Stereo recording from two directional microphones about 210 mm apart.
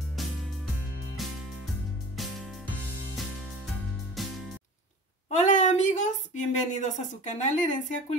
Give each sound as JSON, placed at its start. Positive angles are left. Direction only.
{"t": 0.2, "sound": "music", "side_deg": 0}
{"t": 4.2, "sound": "music", "side_deg": 0}
{"t": 5.3, "sound": "a woman's voice", "side_deg": 35}